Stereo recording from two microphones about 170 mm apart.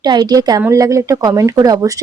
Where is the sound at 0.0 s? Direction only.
25° right (ahead or behind).